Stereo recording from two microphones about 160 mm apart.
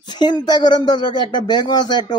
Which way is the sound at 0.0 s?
25° left (ahead or behind).